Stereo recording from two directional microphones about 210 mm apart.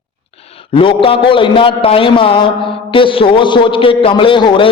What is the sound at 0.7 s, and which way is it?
A man's voice, 25° left (ahead or behind).